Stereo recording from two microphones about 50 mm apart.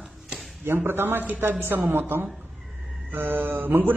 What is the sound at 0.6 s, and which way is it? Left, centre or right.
A man's voice, right.